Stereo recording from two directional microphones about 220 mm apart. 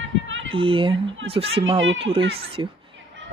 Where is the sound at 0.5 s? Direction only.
25° right (ahead or behind).